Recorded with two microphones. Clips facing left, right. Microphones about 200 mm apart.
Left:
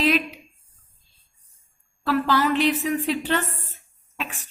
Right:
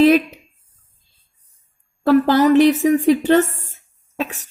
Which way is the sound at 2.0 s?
45° right (ahead or behind).